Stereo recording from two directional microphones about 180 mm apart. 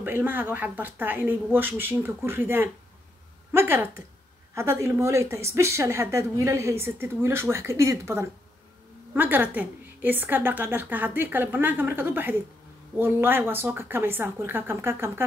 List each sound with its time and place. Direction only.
0.0 s speech: 10° right (ahead or behind)